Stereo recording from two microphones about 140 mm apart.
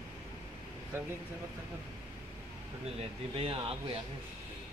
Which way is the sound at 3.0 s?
40° right (ahead or behind).